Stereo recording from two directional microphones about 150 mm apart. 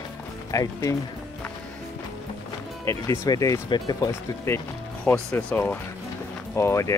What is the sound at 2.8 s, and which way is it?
Speech, 20° left (ahead or behind).